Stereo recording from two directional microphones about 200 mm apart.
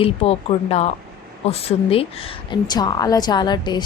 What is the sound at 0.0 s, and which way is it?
A woman's voice, 30° left (ahead or behind).